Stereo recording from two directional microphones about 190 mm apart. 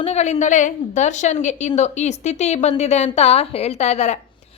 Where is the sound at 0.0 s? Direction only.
35° left (ahead or behind).